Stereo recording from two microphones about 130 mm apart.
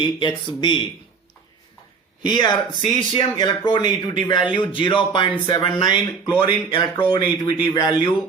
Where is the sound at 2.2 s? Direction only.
35° left (ahead or behind).